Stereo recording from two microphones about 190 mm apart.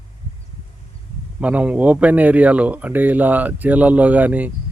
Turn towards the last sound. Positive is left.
turn(degrees=-10)  # may be behind; listen again after turning